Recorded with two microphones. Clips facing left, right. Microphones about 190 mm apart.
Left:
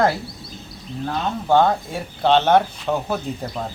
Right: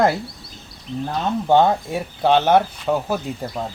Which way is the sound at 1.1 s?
20° right (ahead or behind).